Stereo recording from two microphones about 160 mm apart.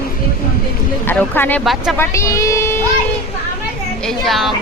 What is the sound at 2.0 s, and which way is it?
Speech, 20° left (ahead or behind).